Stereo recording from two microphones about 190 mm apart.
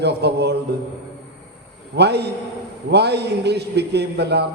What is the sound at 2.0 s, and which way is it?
A man's voice, 60° right (ahead or behind).